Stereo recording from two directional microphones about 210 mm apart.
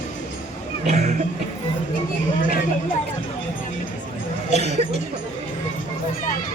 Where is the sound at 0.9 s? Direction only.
35° right (ahead or behind).